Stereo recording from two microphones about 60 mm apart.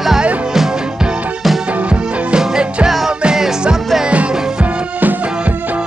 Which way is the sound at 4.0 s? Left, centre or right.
Centre.